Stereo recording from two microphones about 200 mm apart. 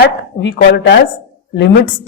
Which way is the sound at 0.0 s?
65° left (ahead or behind).